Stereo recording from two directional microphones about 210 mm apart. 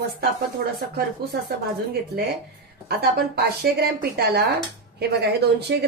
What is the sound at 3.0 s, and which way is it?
Speech, 50° right (ahead or behind).